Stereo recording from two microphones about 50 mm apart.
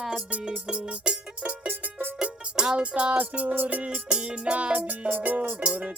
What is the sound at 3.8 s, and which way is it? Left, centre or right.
Music, centre.